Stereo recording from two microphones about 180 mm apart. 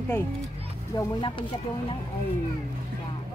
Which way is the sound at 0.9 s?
25° left (ahead or behind).